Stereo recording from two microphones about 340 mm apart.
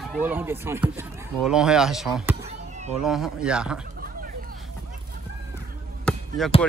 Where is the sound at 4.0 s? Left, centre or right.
Right.